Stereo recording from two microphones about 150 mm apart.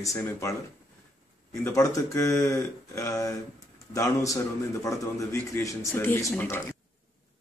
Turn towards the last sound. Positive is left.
turn(degrees=15)  # may be behind; listen again after turning